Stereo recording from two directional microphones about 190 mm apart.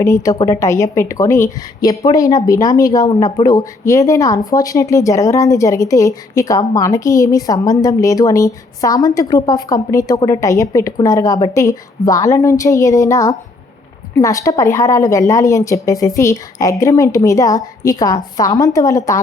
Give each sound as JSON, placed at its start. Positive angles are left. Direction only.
{"t": 0.0, "sound": "a woman's voice", "side_deg": 15}